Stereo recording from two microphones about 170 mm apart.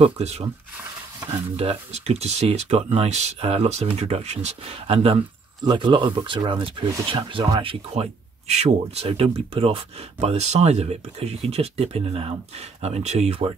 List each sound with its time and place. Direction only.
0.0 s speech: 35° right (ahead or behind)
1.6 s speech: 35° right (ahead or behind)